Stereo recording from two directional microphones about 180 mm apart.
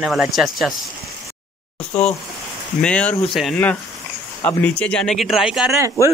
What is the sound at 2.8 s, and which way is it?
Speech, 5° left (ahead or behind).